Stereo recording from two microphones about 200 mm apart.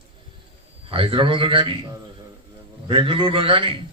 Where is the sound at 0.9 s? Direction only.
25° right (ahead or behind).